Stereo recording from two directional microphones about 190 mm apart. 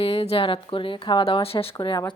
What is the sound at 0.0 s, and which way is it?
A woman's voice, 30° left (ahead or behind).